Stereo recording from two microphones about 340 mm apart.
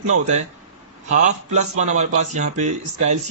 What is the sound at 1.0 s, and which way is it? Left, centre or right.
A man's voice, centre.